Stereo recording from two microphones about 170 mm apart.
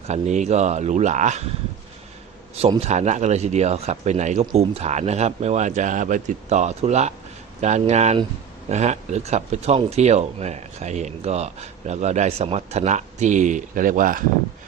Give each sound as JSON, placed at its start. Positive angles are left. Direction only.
{"t": 0.1, "sound": "speech", "side_deg": -40}
{"t": 2.6, "sound": "speech", "side_deg": -40}